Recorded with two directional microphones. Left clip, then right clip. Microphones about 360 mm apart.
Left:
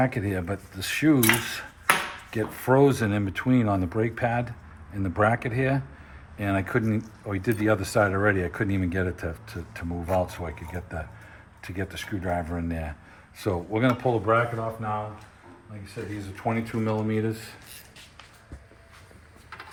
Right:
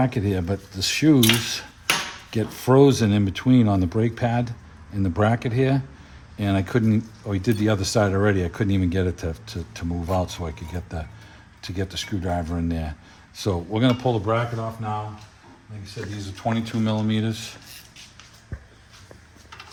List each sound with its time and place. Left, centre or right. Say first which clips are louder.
0.0 s speech: right 2 dB; right
16.4 s speech: right 2 dB; right